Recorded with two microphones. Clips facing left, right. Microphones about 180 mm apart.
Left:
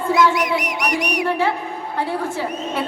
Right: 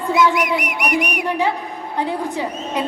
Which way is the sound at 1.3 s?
15° right (ahead or behind).